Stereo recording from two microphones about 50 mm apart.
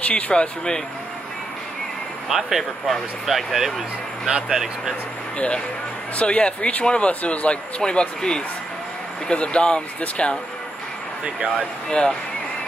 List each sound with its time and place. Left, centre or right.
0.0 s speech: left
2.2 s speech: centre
6.1 s speech: left
11.5 s speech: centre